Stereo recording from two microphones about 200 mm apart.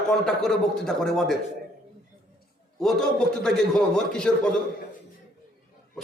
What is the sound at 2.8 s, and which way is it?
A man's voice, 5° left (ahead or behind).